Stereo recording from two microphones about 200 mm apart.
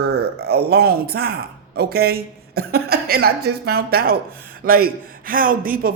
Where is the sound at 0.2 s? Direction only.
50° right (ahead or behind).